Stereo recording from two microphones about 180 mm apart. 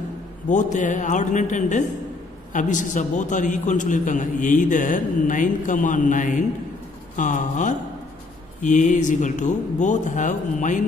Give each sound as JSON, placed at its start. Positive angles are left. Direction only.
{"t": 0.5, "sound": "a man's voice", "side_deg": 45}